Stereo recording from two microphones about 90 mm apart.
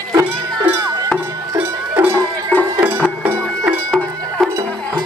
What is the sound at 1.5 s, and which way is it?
Music, 20° right (ahead or behind).